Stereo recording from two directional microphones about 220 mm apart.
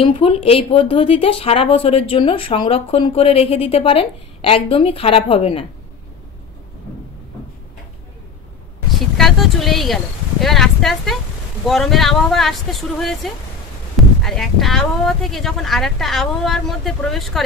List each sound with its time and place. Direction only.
0.0 s speech: 25° left (ahead or behind)
9.1 s a sound: centre (ahead or behind)
10.4 s speech: centre (ahead or behind)